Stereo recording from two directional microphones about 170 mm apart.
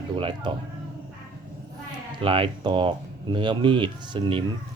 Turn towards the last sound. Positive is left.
turn(degrees=-30)  # may be behind; listen again after turning